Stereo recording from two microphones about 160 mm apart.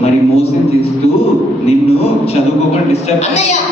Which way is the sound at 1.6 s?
40° left (ahead or behind).